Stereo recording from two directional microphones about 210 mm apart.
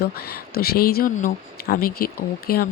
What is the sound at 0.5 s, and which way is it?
Speech, 45° left (ahead or behind).